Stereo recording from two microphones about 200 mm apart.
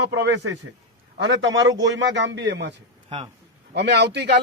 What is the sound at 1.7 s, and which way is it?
A man's voice, 65° right (ahead or behind).